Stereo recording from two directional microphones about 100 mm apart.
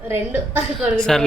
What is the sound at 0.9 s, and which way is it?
Speech, 5° left (ahead or behind).